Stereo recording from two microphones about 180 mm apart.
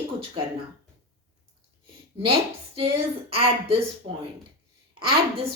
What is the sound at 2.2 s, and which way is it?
A woman's voice, 30° right (ahead or behind).